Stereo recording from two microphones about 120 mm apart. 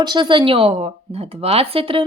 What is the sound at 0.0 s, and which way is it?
Speech, 40° right (ahead or behind).